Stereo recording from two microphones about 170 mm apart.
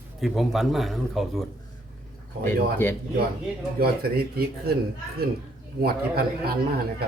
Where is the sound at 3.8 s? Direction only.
65° right (ahead or behind).